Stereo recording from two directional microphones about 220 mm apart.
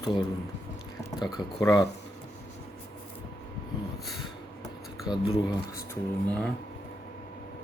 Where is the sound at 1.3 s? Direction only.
15° left (ahead or behind).